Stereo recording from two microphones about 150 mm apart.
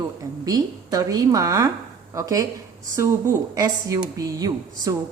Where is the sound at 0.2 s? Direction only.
25° right (ahead or behind).